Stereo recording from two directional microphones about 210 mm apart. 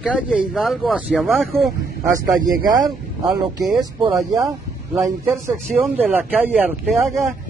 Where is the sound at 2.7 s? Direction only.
20° right (ahead or behind).